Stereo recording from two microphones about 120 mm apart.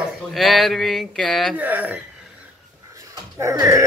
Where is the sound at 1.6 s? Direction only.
15° right (ahead or behind).